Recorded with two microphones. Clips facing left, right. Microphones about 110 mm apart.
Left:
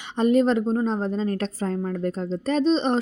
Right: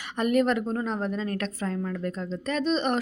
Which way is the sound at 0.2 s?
25° left (ahead or behind).